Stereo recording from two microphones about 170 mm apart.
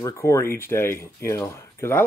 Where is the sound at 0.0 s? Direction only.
15° left (ahead or behind).